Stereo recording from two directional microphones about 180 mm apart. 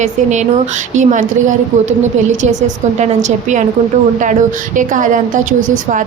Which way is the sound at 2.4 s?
40° right (ahead or behind).